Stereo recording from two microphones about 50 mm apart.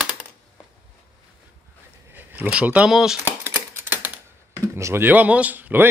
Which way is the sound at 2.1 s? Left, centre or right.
Right.